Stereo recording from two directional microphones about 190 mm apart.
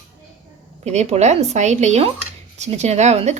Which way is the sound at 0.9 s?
35° right (ahead or behind).